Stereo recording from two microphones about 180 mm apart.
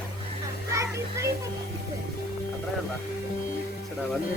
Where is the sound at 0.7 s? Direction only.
15° right (ahead or behind).